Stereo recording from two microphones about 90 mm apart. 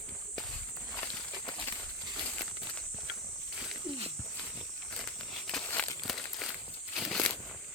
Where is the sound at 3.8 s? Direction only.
90° right.